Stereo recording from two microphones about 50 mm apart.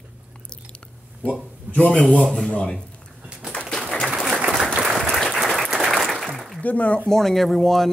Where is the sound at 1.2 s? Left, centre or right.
Left.